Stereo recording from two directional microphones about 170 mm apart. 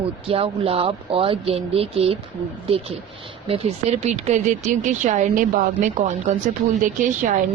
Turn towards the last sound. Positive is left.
turn(degrees=-45)  # may be behind; listen again after turning